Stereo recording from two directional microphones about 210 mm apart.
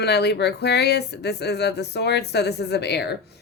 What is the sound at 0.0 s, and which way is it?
Speech, 50° left (ahead or behind).